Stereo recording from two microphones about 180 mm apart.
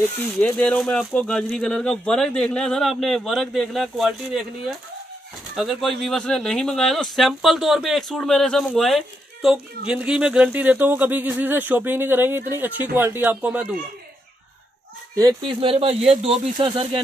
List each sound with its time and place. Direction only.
0.1 s speech: 10° left (ahead or behind); by 13.7 s 10° right (ahead or behind)
15.1 s speech: 25° right (ahead or behind)